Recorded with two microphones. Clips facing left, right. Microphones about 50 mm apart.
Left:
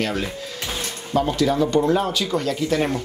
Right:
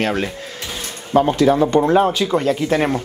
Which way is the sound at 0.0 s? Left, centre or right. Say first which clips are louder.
Right 4 dB; right.